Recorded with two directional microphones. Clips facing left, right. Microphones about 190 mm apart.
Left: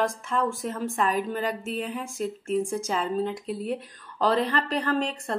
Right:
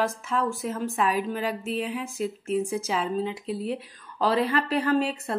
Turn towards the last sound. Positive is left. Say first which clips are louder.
# right 3 dB
turn(degrees=-5)  # may be behind; listen again after turning